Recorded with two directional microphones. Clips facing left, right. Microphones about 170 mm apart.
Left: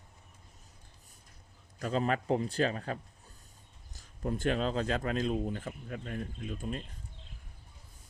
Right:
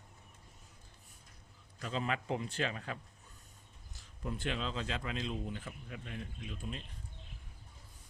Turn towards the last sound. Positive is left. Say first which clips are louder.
# left 6 dB
turn(degrees=45)  # may be behind; listen again after turning